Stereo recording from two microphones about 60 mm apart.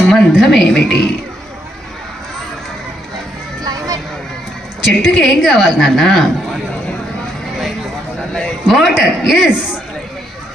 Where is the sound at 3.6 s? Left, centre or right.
Right.